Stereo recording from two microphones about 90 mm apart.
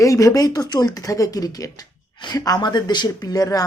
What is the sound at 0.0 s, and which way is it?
Speech, 40° left (ahead or behind).